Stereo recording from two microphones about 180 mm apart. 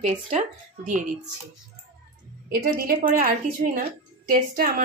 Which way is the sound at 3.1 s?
50° right (ahead or behind).